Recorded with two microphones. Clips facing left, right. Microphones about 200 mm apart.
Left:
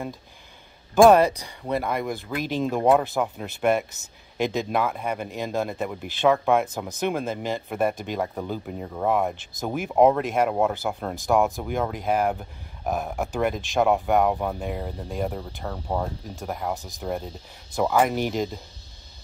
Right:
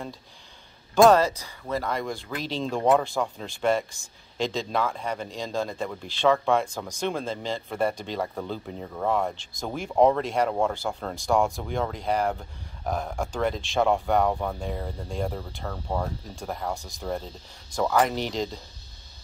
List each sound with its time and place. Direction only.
1.0 s speech: 15° left (ahead or behind)